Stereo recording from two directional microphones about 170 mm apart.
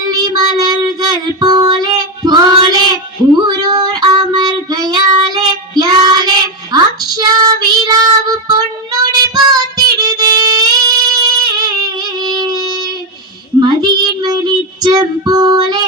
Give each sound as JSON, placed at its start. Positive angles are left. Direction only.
{"t": 0.1, "sound": "child singing", "side_deg": -25}
{"t": 11.5, "sound": "a sound", "side_deg": -25}
{"t": 13.6, "sound": "child singing", "side_deg": -25}